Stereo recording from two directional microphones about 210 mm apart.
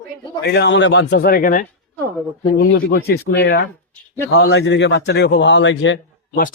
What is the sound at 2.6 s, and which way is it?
A man's voice, 55° left (ahead or behind).